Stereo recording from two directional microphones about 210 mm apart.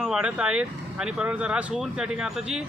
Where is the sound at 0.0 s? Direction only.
5° right (ahead or behind).